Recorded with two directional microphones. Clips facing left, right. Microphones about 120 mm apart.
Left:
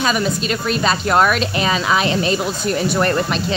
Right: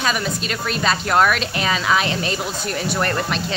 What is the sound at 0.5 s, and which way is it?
Speech, 20° left (ahead or behind).